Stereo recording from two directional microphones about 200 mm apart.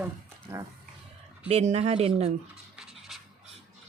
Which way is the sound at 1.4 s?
30° right (ahead or behind).